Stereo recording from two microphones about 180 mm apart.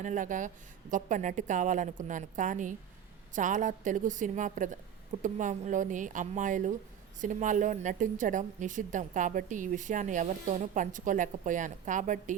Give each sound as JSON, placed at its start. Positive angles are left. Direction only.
{"t": 0.0, "sound": "a woman's voice", "side_deg": -45}